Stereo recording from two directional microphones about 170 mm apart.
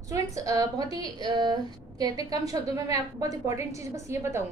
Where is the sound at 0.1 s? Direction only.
20° right (ahead or behind).